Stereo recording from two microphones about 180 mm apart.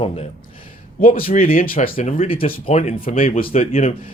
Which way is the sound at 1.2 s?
50° left (ahead or behind).